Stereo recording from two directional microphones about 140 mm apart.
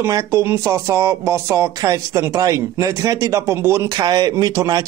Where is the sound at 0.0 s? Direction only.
20° right (ahead or behind).